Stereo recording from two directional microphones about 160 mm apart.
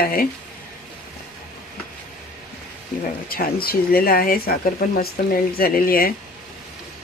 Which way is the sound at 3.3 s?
70° left (ahead or behind).